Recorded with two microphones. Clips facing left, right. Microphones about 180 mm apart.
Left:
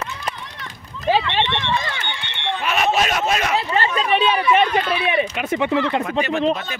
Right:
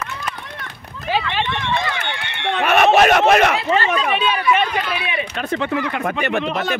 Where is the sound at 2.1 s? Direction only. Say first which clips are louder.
Right 4 dB; 70° right (ahead or behind).